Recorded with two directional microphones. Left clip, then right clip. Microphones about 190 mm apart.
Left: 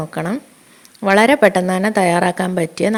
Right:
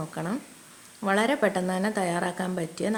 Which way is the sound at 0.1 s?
40° left (ahead or behind).